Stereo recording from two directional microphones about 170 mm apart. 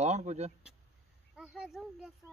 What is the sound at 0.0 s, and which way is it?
Speech, 40° right (ahead or behind).